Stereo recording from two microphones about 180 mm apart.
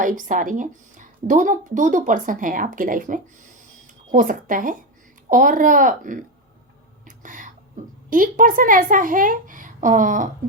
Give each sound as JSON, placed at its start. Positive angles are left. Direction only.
{"t": 0.0, "sound": "speech", "side_deg": -45}
{"t": 7.0, "sound": "a sound", "side_deg": -45}
{"t": 8.1, "sound": "speech", "side_deg": -50}